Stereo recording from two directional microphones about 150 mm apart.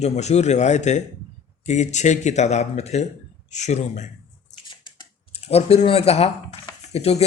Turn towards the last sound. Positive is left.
turn(degrees=45)  # may be behind; listen again after turning